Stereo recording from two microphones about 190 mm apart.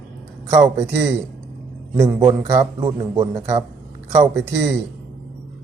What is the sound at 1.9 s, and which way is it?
Speech, 15° right (ahead or behind).